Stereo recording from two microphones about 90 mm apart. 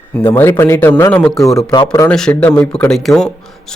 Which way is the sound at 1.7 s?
55° left (ahead or behind).